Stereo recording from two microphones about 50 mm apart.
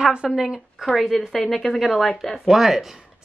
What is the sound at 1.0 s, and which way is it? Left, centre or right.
A woman's voice, centre.